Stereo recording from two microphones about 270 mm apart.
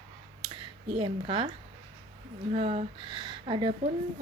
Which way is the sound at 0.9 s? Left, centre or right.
Centre.